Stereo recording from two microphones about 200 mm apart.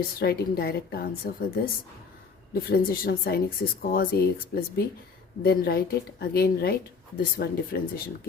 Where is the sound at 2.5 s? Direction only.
45° left (ahead or behind).